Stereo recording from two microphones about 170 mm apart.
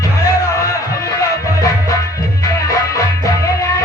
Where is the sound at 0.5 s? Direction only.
20° left (ahead or behind).